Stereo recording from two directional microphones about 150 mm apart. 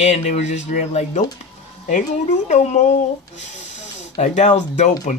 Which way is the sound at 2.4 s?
50° left (ahead or behind).